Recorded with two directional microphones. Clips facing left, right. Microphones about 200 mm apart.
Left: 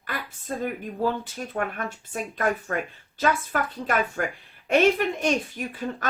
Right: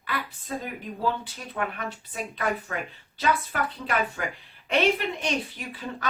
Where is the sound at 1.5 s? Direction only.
50° left (ahead or behind).